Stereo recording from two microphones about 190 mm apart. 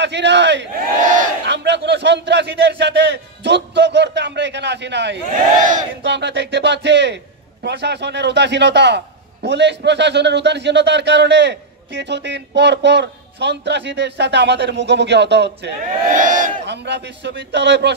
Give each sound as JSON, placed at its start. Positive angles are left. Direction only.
{"t": 0.0, "sound": "speech", "side_deg": -65}
{"t": 1.0, "sound": "battle cry", "side_deg": -45}
{"t": 1.4, "sound": "a man's voice", "side_deg": -65}
{"t": 16.1, "sound": "crowd", "side_deg": -45}
{"t": 16.6, "sound": "a man's voice", "side_deg": -65}